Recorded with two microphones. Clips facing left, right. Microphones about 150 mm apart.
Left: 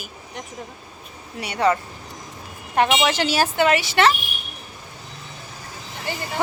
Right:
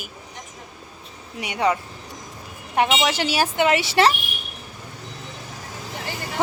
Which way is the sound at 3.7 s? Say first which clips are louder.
Even; 30° right (ahead or behind).